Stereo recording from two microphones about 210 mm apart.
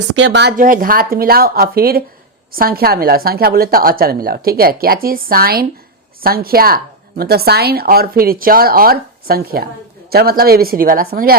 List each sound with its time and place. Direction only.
0.2 s speech: 55° right (ahead or behind)
0.5 s a woman's voice: 40° right (ahead or behind)